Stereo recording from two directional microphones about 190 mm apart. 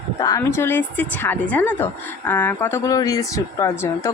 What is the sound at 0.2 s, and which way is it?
A woman's voice, 15° left (ahead or behind).